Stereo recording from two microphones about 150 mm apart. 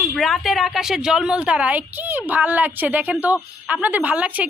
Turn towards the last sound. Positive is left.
turn(degrees=-10)  # may be behind; listen again after turning